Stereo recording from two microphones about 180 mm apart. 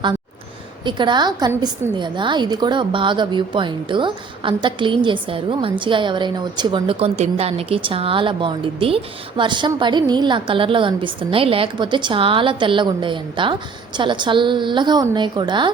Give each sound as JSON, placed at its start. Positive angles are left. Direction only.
{"t": 0.9, "sound": "a woman's voice", "side_deg": -25}